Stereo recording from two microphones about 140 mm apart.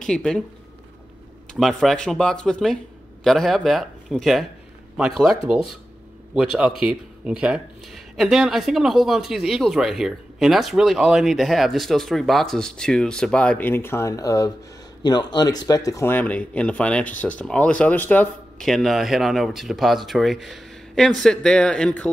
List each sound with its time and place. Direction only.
0.0 s speech: 5° left (ahead or behind)
1.5 s speech: centre (ahead or behind)
18.6 s speech: centre (ahead or behind)